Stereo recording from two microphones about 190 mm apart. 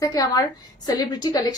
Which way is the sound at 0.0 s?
20° left (ahead or behind).